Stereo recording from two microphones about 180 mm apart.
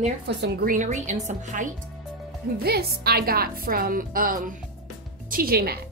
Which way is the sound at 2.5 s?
60° right (ahead or behind).